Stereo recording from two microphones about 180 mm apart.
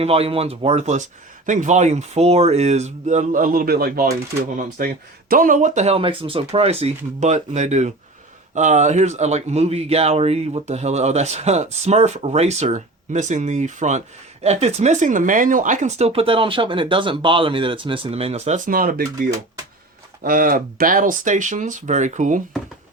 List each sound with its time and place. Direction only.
0.0 s speech: 35° right (ahead or behind); by 4.1 s 55° right (ahead or behind)
4.5 s speech: 45° right (ahead or behind)
20.2 s speech: 50° right (ahead or behind)